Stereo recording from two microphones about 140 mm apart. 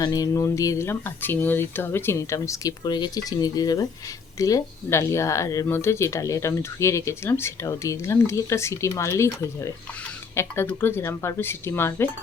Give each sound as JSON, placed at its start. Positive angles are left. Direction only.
{"t": 0.0, "sound": "speech", "side_deg": 25}